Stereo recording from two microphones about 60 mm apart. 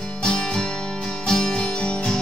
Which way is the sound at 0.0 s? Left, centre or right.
Centre.